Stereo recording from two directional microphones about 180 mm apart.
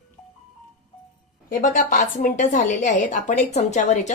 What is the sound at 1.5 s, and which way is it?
Speech, 45° left (ahead or behind).